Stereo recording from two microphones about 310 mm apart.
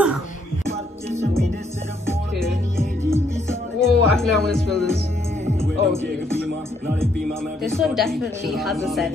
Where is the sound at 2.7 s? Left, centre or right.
Centre.